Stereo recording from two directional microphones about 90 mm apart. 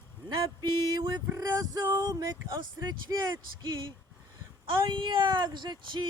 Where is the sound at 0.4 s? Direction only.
50° right (ahead or behind).